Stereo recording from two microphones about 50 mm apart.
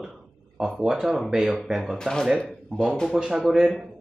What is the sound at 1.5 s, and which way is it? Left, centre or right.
Speech, centre.